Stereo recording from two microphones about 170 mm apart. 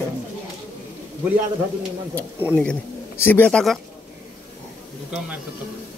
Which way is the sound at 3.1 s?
10° left (ahead or behind).